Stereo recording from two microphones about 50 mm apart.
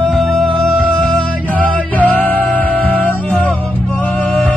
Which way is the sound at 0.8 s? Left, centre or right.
Left.